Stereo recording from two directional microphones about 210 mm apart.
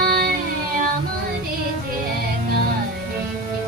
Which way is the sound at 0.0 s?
45° right (ahead or behind).